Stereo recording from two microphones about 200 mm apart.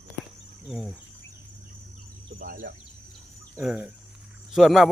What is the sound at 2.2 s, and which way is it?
Bird, 45° right (ahead or behind).